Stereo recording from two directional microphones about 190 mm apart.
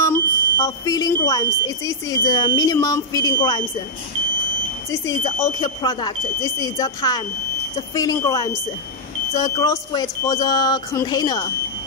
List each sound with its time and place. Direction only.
0.0 s speech: 15° left (ahead or behind)
5.4 s speech: 20° left (ahead or behind)